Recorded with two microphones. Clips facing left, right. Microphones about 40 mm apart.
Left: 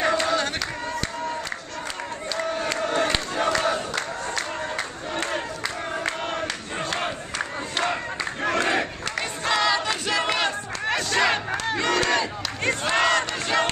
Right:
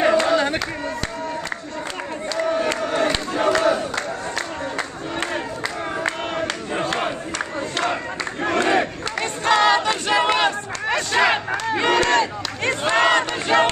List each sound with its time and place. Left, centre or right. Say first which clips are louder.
0.0 s crowd: right 5 dB; centre
2.3 s crowd: right 5 dB; centre
6.0 s crowd: right 4 dB; centre
11.7 s battle cry: right 5 dB; right
12.8 s crowd: right 5 dB; centre